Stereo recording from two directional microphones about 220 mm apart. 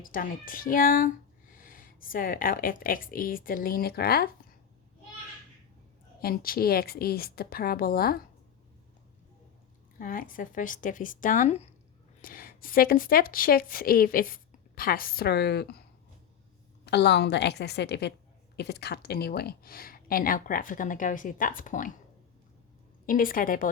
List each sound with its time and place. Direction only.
0.0 s a woman's voice: 40° left (ahead or behind)
6.2 s a woman's voice: 40° left (ahead or behind)
10.0 s a woman's voice: 40° left (ahead or behind)
12.2 s a woman's voice: 40° left (ahead or behind)
16.8 s a woman's voice: 50° left (ahead or behind)
23.0 s a woman's voice: 40° left (ahead or behind)